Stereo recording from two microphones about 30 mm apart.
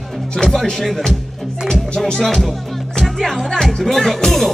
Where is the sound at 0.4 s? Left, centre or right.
Centre.